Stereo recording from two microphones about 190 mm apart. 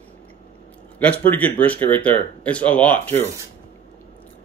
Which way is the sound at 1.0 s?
10° left (ahead or behind).